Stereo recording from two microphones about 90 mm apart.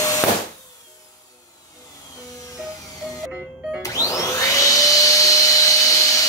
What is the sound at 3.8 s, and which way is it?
Vacuum cleaner, 40° left (ahead or behind).